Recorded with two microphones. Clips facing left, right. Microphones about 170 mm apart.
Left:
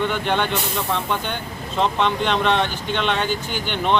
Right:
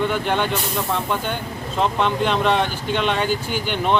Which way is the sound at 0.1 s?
5° right (ahead or behind).